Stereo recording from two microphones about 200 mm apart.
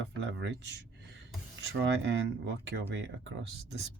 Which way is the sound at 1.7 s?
60° right (ahead or behind).